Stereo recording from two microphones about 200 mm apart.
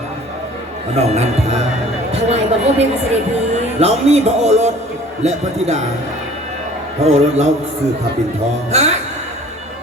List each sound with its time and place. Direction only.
0.9 s speech: 30° right (ahead or behind)
7.0 s speech: 35° right (ahead or behind)
8.7 s music: 35° right (ahead or behind)